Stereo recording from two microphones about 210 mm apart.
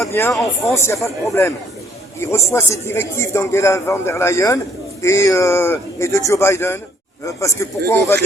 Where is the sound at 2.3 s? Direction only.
15° left (ahead or behind).